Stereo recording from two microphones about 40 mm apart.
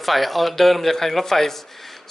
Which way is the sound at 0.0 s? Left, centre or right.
Centre.